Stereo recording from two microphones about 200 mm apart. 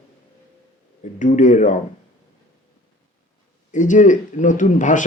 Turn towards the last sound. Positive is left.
turn(degrees=40)  # may be behind; listen again after turning